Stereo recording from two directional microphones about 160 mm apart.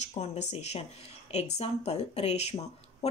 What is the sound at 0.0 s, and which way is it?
Speech, 45° left (ahead or behind).